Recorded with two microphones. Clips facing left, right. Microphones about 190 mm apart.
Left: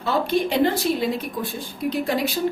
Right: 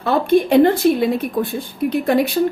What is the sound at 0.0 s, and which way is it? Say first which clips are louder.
A woman's voice: right 6 dB; 55° right (ahead or behind).